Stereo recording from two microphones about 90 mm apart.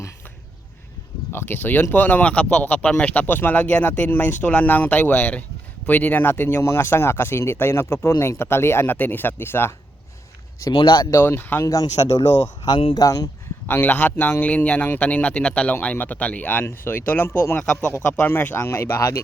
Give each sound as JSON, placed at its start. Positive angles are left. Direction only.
{"t": 1.3, "sound": "speech", "side_deg": 25}
{"t": 10.7, "sound": "speech", "side_deg": 60}
{"t": 11.2, "sound": "speech", "side_deg": 25}
{"t": 11.6, "sound": "speech", "side_deg": 40}
{"t": 12.6, "sound": "speech", "side_deg": 70}
{"t": 12.9, "sound": "speech", "side_deg": 45}
{"t": 13.7, "sound": "speech", "side_deg": 20}